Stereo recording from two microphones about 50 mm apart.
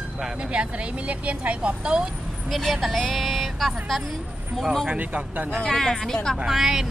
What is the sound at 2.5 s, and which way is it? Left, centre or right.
Vehicle, centre.